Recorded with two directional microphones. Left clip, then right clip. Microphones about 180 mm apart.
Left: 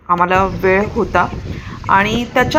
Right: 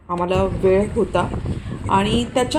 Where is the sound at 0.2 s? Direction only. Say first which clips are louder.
Left 6 dB; 10° left (ahead or behind).